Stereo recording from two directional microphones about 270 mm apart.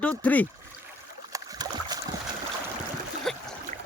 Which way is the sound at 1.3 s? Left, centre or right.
Centre.